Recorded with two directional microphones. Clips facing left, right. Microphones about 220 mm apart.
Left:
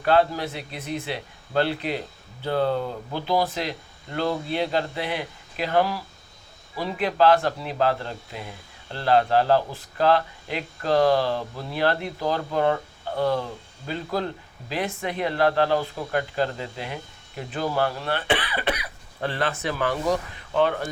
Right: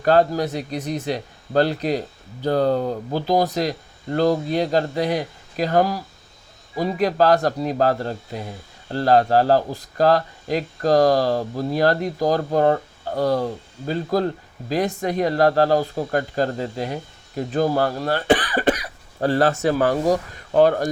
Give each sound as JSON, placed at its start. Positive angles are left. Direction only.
{"t": 0.0, "sound": "speech", "side_deg": -40}